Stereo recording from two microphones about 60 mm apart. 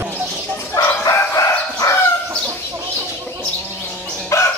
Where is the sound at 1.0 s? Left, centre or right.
Left.